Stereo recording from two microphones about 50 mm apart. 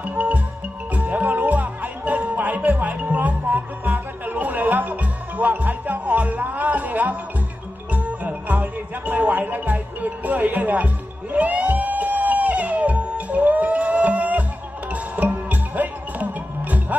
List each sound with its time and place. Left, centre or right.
0.0 s music: right